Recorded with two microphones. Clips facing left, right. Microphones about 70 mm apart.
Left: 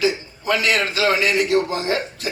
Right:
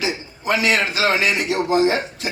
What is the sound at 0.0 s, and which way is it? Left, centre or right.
A man's voice, right.